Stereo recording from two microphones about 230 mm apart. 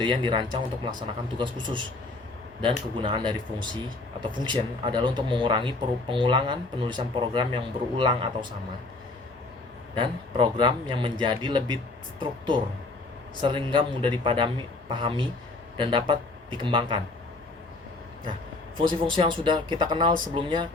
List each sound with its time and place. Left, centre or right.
0.0 s speech: right
9.9 s speech: right
18.8 s speech: right